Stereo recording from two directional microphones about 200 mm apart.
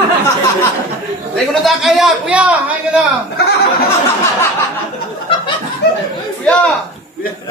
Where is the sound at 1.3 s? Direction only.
Centre (ahead or behind).